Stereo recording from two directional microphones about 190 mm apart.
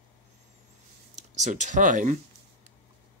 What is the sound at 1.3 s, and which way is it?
Speech, 40° right (ahead or behind).